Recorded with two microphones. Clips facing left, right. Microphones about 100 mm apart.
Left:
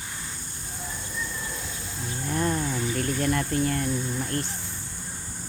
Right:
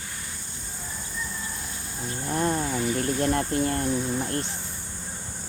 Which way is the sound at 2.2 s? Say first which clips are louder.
Right 1 dB; 25° right (ahead or behind).